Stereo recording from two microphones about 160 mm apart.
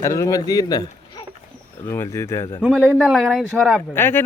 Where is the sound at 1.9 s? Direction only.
15° left (ahead or behind).